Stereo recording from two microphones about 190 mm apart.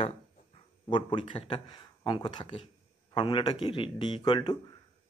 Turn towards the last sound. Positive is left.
turn(degrees=25)  # may be behind; listen again after turning